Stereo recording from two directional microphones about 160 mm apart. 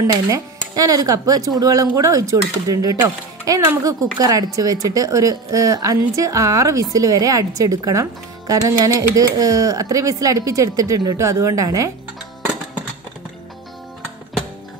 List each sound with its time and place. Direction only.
0.7 s speech: 20° right (ahead or behind)